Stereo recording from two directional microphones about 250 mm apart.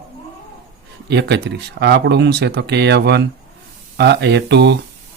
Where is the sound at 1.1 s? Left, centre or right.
Right.